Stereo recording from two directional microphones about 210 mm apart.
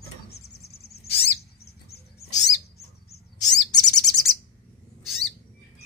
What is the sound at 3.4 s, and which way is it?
Chirp, 35° left (ahead or behind).